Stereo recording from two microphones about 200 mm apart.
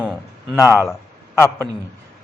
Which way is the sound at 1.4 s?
10° left (ahead or behind).